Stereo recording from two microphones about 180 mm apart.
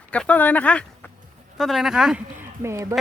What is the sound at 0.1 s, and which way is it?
Speech, 5° left (ahead or behind).